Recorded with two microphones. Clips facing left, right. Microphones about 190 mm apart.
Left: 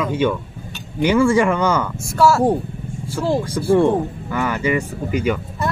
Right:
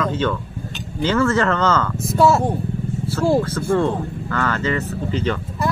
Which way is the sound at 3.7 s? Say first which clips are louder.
Left 6 dB; 15° left (ahead or behind).